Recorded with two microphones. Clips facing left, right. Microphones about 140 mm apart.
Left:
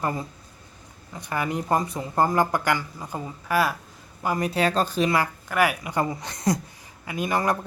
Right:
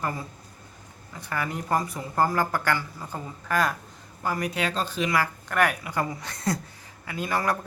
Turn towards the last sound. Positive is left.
turn(degrees=20)  # may be behind; listen again after turning